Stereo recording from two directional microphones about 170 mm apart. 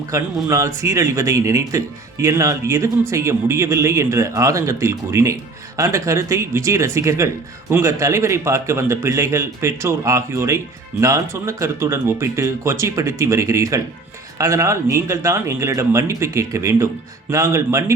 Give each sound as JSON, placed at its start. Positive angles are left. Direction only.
{"t": 0.1, "sound": "speech", "side_deg": -20}